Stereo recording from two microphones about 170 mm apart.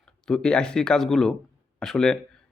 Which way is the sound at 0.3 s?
5° left (ahead or behind).